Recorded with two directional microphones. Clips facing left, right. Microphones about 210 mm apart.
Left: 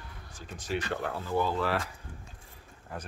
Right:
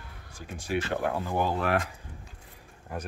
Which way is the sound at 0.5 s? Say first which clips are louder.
Right 3 dB; 10° right (ahead or behind).